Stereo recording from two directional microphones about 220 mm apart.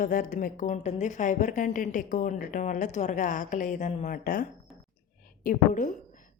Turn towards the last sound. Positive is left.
turn(degrees=35)  # may be behind; listen again after turning